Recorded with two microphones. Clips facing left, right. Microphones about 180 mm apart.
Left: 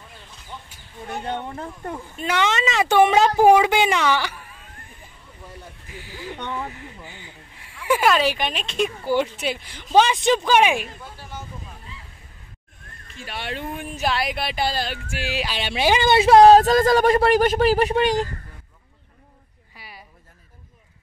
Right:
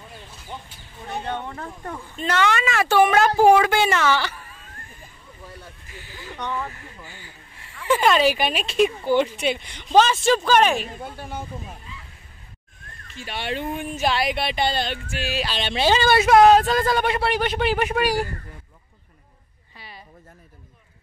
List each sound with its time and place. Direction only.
1.3 s speech: 20° left (ahead or behind)
5.9 s speech: 10° left (ahead or behind)
6.3 s speech: 20° left (ahead or behind); by 8.9 s 5° right (ahead or behind)
9.0 s speech: 5° left (ahead or behind)
11.0 s speech: 55° right (ahead or behind)
13.1 s speech: centre (ahead or behind); by 16.3 s 20° left (ahead or behind)
16.3 s speech: 35° left (ahead or behind)